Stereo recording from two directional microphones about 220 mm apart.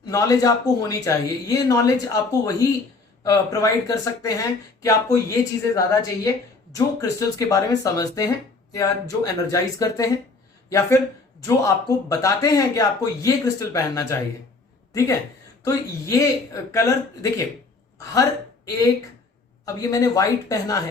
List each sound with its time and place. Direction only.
0.1 s a woman's voice: 15° left (ahead or behind)
15.6 s a woman's voice: 15° left (ahead or behind)
17.9 s a woman's voice: 15° left (ahead or behind)